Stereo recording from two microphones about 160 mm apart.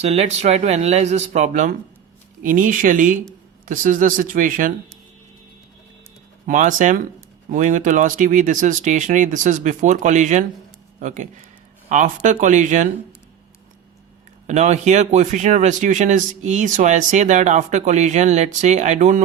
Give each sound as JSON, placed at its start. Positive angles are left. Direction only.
{"t": 0.0, "sound": "speech", "side_deg": -40}
{"t": 6.5, "sound": "speech", "side_deg": -55}
{"t": 14.4, "sound": "speech", "side_deg": -45}